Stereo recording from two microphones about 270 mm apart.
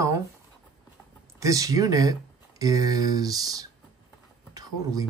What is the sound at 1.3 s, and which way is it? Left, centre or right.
Speech, centre.